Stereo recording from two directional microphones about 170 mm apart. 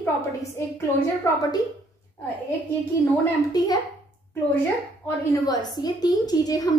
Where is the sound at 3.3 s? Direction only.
20° left (ahead or behind).